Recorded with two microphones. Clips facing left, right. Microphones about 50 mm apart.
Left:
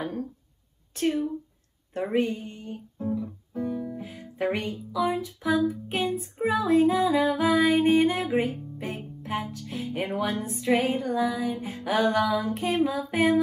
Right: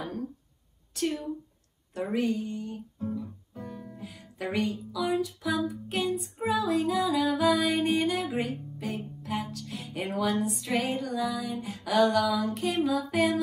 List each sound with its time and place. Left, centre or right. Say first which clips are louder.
0.9 s music: left 5 dB; left
2.0 s music: left 2 dB; left